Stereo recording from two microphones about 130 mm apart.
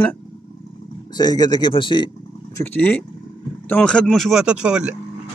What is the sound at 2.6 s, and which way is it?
A man's voice, 15° left (ahead or behind).